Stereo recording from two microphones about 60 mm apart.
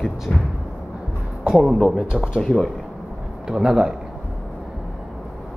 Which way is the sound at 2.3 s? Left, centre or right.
Centre.